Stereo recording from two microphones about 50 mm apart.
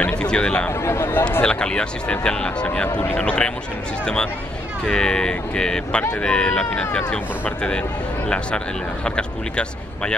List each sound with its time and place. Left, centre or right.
0.0 s a sound: left
0.7 s speech: left
1.4 s speech: centre
9.0 s speech: centre